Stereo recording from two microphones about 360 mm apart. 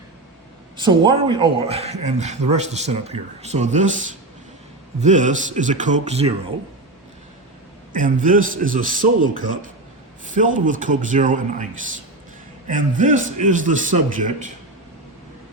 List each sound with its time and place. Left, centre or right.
0.8 s a man's voice: centre
7.9 s a man's voice: right